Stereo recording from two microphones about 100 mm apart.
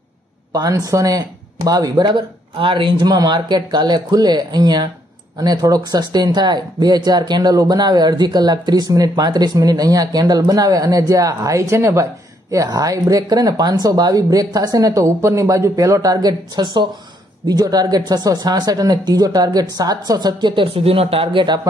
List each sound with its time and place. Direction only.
0.5 s speech: 40° right (ahead or behind); by 3.1 s 60° right (ahead or behind)
3.1 s speech: 45° right (ahead or behind)